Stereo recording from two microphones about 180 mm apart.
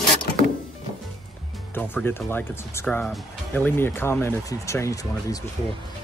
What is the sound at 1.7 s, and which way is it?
Speech, 10° left (ahead or behind).